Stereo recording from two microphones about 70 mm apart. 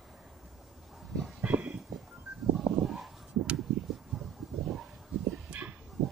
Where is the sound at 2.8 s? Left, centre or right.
Centre.